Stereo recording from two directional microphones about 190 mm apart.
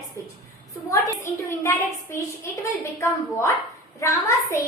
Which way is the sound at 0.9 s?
15° left (ahead or behind).